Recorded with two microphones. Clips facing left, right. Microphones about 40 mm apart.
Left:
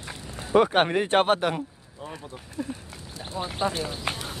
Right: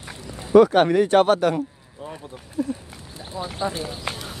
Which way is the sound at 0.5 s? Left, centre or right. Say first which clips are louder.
Right 6 dB; left.